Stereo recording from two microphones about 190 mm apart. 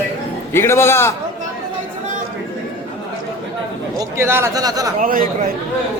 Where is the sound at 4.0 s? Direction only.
15° right (ahead or behind).